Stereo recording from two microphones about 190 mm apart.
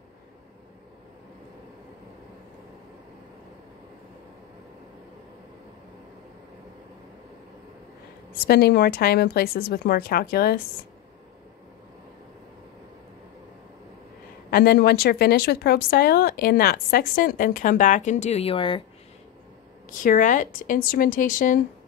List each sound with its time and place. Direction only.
8.5 s speech: 55° left (ahead or behind)
14.5 s speech: 55° left (ahead or behind); by 18.8 s 30° left (ahead or behind)
19.9 s speech: 45° left (ahead or behind)